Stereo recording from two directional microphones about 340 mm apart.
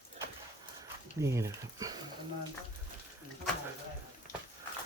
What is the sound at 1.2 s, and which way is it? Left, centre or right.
Speech, centre.